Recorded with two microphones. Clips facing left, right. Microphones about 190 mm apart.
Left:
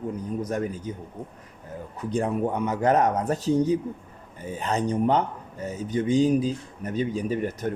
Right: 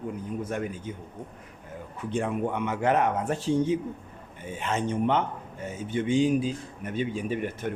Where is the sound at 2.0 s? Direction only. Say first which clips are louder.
Left 3 dB; 40° left (ahead or behind).